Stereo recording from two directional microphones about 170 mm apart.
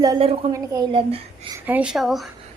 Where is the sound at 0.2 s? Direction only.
35° right (ahead or behind).